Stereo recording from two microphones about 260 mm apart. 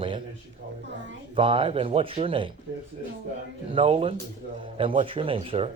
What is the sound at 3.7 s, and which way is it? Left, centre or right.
Speech, right.